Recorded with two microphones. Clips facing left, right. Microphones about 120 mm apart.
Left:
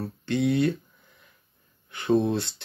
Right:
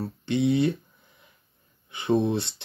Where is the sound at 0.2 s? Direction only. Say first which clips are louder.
Right 1 dB; 20° right (ahead or behind).